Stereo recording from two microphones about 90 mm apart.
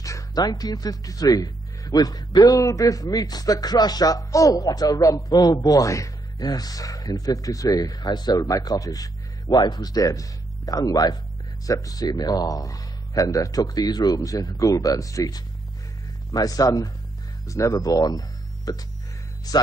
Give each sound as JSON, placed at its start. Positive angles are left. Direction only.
{"t": 0.0, "sound": "speech", "side_deg": 40}